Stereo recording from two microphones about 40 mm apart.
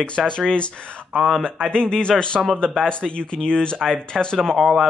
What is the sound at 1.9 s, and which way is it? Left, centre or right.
Speech, left.